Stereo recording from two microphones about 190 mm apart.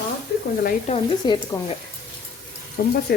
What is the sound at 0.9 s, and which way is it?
Speech, 35° left (ahead or behind).